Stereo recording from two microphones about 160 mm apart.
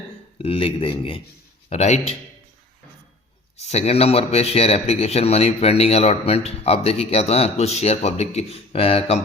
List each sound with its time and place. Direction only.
0.3 s a man's voice: 35° left (ahead or behind)
3.6 s a man's voice: 40° left (ahead or behind)